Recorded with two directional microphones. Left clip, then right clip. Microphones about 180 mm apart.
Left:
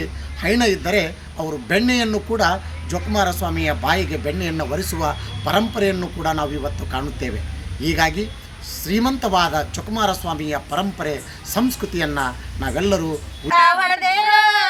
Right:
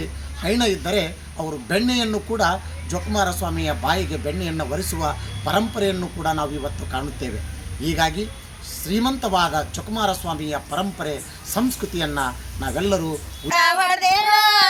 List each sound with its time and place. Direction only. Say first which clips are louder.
0.4 s speech: left 3 dB; 5° left (ahead or behind)
13.5 s female singing: left 3 dB; 55° right (ahead or behind)